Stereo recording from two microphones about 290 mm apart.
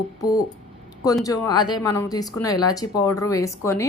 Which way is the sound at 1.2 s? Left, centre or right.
Centre.